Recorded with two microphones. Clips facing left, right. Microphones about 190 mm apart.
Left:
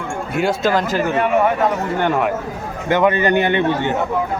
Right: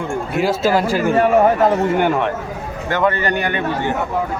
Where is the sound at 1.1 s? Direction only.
40° right (ahead or behind).